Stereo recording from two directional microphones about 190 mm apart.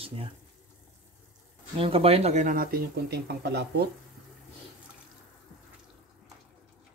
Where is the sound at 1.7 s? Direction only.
30° right (ahead or behind); by 3.9 s 60° right (ahead or behind).